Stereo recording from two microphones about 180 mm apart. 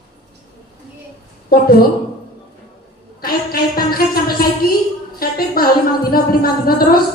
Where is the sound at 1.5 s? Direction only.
55° left (ahead or behind).